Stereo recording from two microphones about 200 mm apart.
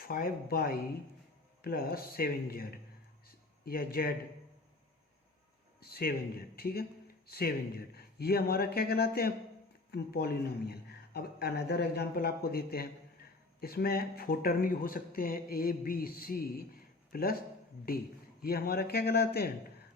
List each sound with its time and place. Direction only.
0.0 s speech: 45° left (ahead or behind)
3.2 s a sound: 50° left (ahead or behind)
5.8 s speech: 50° left (ahead or behind)
18.4 s speech: 50° left (ahead or behind)